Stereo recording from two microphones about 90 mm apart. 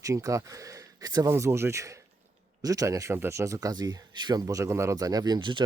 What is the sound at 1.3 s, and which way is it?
Speech, 30° right (ahead or behind).